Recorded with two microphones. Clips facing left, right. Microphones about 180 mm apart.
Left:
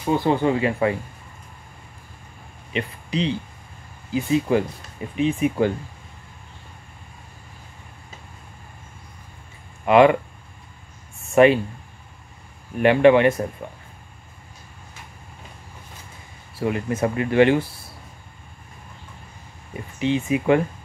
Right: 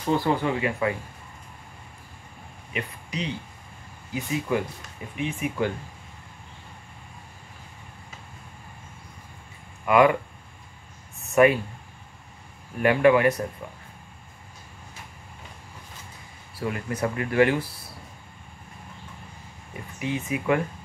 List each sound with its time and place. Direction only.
0.0 s speech: 20° left (ahead or behind)
2.7 s speech: 30° left (ahead or behind)
9.8 s speech: 25° left (ahead or behind)
11.3 s speech: 25° left (ahead or behind)
12.7 s speech: 25° left (ahead or behind)
16.5 s speech: 25° left (ahead or behind)
20.0 s speech: 25° left (ahead or behind)